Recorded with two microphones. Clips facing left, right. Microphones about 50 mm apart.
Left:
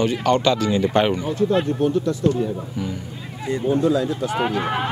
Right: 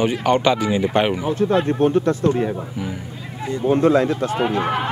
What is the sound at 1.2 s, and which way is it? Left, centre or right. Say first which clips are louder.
Speech: right 2 dB; right.